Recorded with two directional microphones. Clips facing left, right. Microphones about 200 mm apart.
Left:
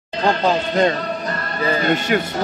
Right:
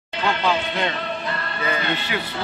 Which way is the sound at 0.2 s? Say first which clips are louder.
Left 4 dB; 40° left (ahead or behind).